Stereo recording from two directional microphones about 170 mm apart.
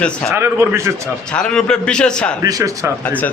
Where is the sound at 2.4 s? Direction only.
20° right (ahead or behind).